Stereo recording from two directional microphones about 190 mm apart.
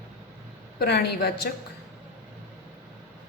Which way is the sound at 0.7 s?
60° left (ahead or behind).